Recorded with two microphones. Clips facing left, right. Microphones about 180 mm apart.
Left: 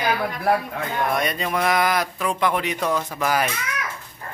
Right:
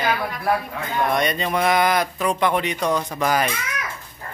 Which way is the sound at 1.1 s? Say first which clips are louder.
Right 3 dB; 5° left (ahead or behind).